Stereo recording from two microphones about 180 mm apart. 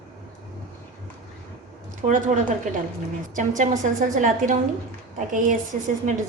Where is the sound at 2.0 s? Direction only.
45° right (ahead or behind).